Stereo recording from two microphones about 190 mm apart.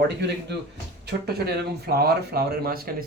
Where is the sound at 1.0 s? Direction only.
55° right (ahead or behind).